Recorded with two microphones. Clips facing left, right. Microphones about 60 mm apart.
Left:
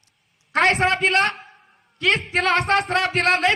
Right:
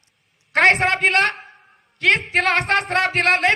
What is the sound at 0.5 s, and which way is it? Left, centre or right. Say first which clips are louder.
A man's voice: right 2 dB; right.